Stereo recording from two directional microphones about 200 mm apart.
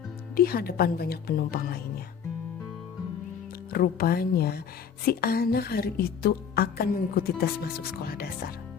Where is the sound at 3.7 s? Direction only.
50° left (ahead or behind).